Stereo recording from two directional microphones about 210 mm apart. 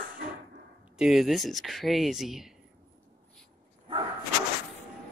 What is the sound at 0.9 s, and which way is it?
Speech, centre (ahead or behind).